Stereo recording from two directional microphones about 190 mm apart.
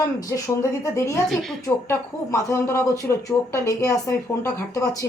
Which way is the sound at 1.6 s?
15° left (ahead or behind).